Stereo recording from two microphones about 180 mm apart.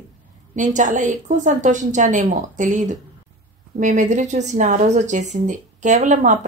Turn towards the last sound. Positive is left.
turn(degrees=-45)  # may be behind; listen again after turning